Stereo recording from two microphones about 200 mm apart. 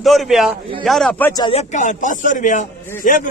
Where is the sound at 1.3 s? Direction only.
25° left (ahead or behind).